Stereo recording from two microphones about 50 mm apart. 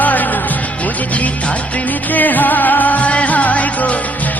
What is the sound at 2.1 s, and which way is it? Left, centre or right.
Music, left.